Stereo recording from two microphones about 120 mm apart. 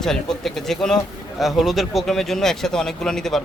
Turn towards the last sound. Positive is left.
turn(degrees=5)  # may be behind; listen again after turning